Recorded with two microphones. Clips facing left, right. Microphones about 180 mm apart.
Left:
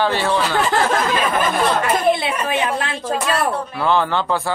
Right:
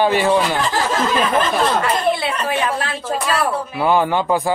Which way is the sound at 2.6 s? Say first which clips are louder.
Even; 25° left (ahead or behind).